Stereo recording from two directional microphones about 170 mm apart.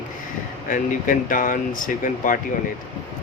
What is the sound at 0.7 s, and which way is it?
Speech, 55° left (ahead or behind).